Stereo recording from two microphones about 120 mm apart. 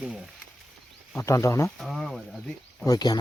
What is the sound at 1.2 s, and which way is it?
Speech, 25° left (ahead or behind).